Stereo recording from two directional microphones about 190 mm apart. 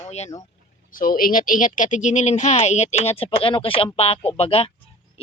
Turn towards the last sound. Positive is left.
turn(degrees=30)  # may be behind; listen again after turning